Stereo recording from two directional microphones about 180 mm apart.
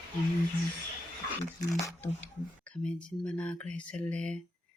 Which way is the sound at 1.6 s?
15° left (ahead or behind).